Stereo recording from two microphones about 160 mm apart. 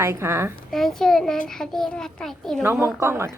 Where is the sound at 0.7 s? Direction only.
Centre (ahead or behind).